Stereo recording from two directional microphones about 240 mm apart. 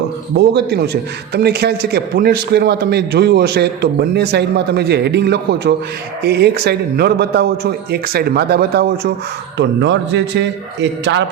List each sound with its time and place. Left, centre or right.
0.3 s a man's voice: right